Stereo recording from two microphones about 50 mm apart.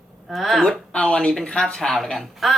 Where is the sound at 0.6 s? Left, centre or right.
Centre.